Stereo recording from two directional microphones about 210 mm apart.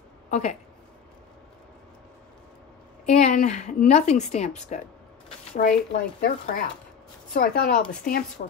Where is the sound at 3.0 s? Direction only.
35° left (ahead or behind).